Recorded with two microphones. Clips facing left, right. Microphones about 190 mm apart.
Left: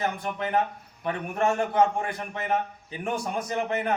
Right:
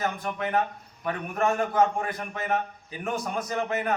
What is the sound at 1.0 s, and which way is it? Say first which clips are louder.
A man's voice: left 1 dB; 30° left (ahead or behind).